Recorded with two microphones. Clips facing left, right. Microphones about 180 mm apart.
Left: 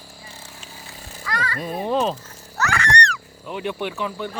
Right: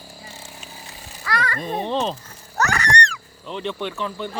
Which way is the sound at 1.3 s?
65° right (ahead or behind).